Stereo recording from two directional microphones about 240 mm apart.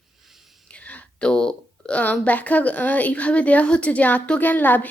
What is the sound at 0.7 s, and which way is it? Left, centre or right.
A woman's voice, centre.